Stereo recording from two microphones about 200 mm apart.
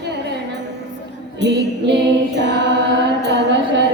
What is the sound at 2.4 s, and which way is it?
Mantra, 60° right (ahead or behind).